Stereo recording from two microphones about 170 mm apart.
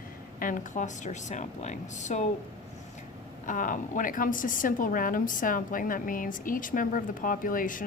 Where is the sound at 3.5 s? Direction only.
50° left (ahead or behind).